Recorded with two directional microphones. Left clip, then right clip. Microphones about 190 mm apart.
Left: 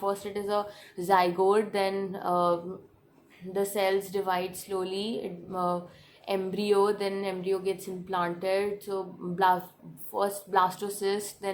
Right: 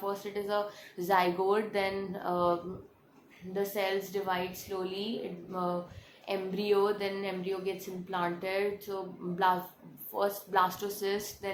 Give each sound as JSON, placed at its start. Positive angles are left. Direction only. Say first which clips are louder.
{"t": 0.0, "sound": "a woman's voice", "louder": "left 4 dB", "side_deg": 30}